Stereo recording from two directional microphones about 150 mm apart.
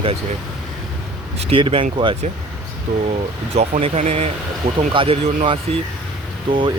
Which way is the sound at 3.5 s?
50° right (ahead or behind).